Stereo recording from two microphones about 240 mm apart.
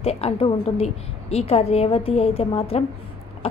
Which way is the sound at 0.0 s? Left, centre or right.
Left.